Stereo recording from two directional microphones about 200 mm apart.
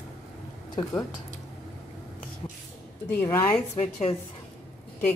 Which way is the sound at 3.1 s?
10° left (ahead or behind).